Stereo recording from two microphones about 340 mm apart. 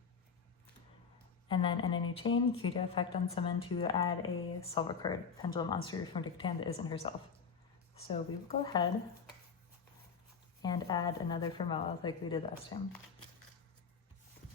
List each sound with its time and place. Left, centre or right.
1.5 s speech: centre
10.6 s speech: centre